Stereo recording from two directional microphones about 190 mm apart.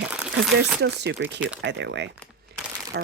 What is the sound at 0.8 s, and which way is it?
Speech, 65° right (ahead or behind).